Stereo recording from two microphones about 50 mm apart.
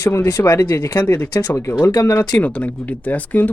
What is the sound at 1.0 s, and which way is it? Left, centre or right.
Speech, left.